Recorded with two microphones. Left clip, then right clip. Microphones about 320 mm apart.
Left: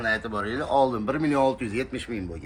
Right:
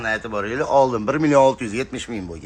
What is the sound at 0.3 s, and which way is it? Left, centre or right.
A man's voice, right.